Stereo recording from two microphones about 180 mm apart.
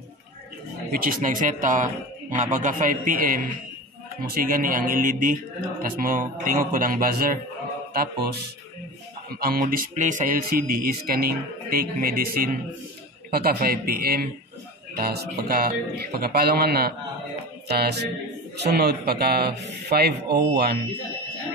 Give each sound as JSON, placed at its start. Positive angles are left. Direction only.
{"t": 0.9, "sound": "mantra", "side_deg": -50}
{"t": 7.9, "sound": "speech", "side_deg": -60}